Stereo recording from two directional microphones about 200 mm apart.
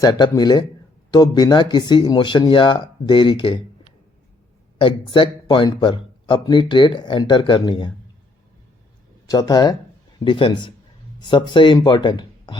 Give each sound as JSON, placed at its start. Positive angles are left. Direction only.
{"t": 0.0, "sound": "a man's voice", "side_deg": 20}
{"t": 4.8, "sound": "a man's voice", "side_deg": 25}
{"t": 9.2, "sound": "a man's voice", "side_deg": 20}